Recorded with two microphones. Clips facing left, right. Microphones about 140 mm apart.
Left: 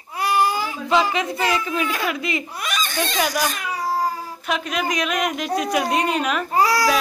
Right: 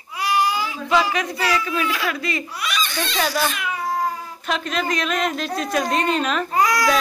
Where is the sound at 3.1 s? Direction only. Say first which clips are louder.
Right 1 dB; 15° left (ahead or behind).